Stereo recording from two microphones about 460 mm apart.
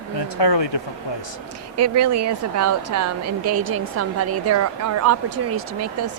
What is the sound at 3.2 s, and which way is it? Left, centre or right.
Speech, right.